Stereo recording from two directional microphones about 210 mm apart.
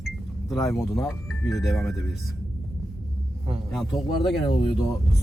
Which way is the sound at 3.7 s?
Centre (ahead or behind).